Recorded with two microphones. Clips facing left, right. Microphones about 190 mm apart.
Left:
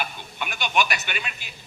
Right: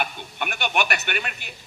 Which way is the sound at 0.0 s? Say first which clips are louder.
Right 3 dB; 55° right (ahead or behind).